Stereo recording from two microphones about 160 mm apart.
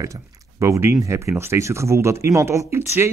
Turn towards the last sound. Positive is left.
turn(degrees=-15)  # may be behind; listen again after turning